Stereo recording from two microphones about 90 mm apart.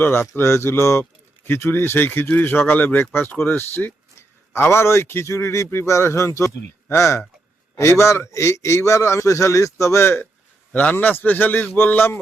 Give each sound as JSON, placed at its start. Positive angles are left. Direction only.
{"t": 0.0, "sound": "a man's voice", "side_deg": 25}